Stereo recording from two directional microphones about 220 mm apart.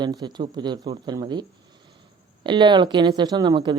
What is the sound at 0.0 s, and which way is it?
Speech, 20° right (ahead or behind).